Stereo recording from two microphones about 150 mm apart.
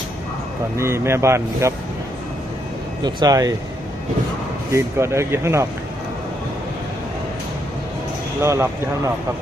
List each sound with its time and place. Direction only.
0.8 s speech: 15° right (ahead or behind)
3.0 s speech: 25° right (ahead or behind)
4.7 s speech: 20° right (ahead or behind)
8.4 s speech: 15° right (ahead or behind)